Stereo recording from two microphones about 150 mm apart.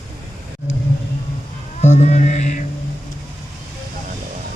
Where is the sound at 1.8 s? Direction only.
50° left (ahead or behind).